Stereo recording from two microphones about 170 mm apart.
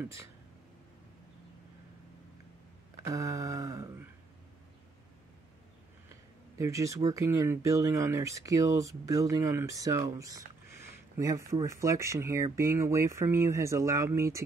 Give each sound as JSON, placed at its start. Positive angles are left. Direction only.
{"t": 0.0, "sound": "speech", "side_deg": -15}
{"t": 3.0, "sound": "speech", "side_deg": -20}
{"t": 6.6, "sound": "speech", "side_deg": -20}